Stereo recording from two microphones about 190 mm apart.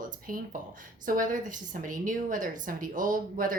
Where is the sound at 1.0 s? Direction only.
45° right (ahead or behind).